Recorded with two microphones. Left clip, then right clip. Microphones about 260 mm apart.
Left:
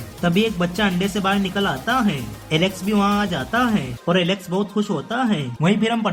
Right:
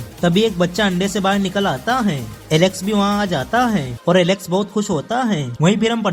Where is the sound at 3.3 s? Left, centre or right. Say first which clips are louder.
Right 3 dB; right.